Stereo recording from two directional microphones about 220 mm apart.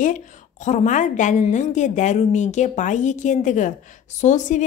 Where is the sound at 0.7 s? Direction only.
35° left (ahead or behind).